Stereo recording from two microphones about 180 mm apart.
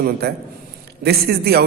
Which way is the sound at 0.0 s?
60° right (ahead or behind).